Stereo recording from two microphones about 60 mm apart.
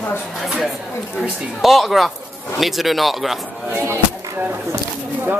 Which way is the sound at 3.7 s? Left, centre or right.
Right.